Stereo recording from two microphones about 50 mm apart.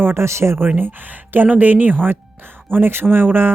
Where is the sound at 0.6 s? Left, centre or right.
Right.